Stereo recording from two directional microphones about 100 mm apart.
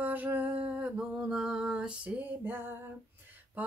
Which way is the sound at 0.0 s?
20° right (ahead or behind).